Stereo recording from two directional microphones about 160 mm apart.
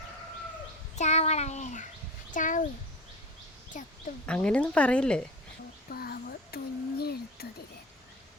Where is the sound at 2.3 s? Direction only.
55° left (ahead or behind).